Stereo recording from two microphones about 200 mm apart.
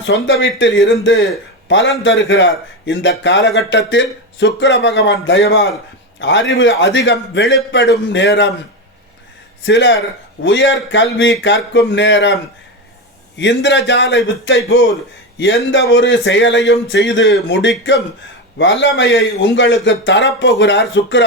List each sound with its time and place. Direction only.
0.0 s a man's voice: 65° left (ahead or behind)
9.6 s a man's voice: 65° left (ahead or behind)
13.3 s a man's voice: 65° left (ahead or behind)